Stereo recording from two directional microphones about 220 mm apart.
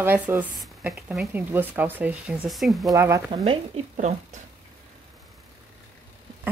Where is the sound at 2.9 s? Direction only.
15° right (ahead or behind).